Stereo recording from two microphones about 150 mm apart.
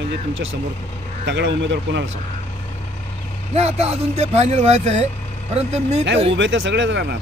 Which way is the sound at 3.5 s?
45° right (ahead or behind).